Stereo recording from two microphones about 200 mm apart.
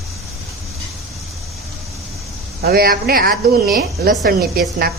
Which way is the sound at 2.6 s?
50° right (ahead or behind).